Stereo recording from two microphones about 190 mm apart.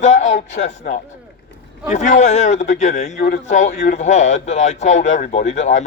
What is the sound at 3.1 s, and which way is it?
A man's voice, 50° left (ahead or behind).